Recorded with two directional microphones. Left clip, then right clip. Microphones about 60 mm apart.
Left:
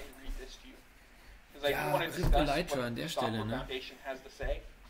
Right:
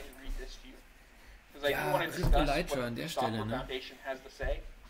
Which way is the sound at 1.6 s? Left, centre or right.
Right.